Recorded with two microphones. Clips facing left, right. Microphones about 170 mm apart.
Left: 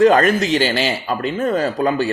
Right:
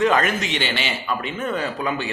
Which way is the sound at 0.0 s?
35° left (ahead or behind).